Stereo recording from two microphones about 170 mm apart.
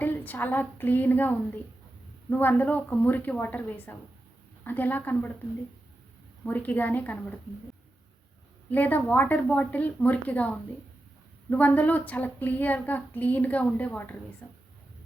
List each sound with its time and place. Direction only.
0.0 s speech: 10° left (ahead or behind)
6.4 s speech: 10° left (ahead or behind)
8.7 s speech: 10° left (ahead or behind)